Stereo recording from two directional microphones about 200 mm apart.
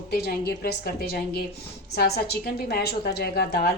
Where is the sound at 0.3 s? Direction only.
50° left (ahead or behind).